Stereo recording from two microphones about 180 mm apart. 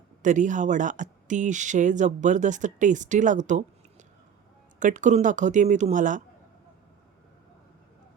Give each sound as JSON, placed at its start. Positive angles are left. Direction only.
{"t": 0.2, "sound": "speech", "side_deg": -45}